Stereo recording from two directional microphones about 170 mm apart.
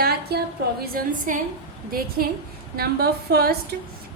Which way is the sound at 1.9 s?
60° right (ahead or behind).